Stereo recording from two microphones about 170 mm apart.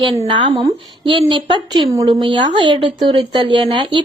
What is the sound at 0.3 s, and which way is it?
A woman's voice, 25° right (ahead or behind).